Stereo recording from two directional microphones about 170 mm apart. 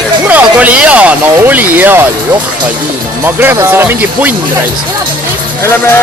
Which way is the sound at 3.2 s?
10° right (ahead or behind).